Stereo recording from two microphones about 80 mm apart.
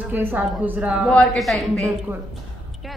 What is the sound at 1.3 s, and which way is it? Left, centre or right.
Speech, centre.